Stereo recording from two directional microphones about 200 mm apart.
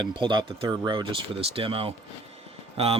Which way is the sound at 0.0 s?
25° right (ahead or behind).